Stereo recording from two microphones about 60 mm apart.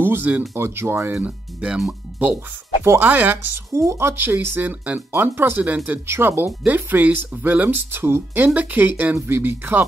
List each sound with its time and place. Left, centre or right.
0.0 s a sound: right
0.6 s speech: right
1.2 s speech: centre
1.9 s music: right
2.8 s speech: right
3.1 s speech: right
3.7 s speech: right
4.2 s speech: right
4.6 s speech: right
6.6 s speech: right
7.9 s speech: right
8.5 s speech: right